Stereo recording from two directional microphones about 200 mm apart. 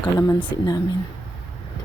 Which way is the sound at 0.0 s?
20° left (ahead or behind).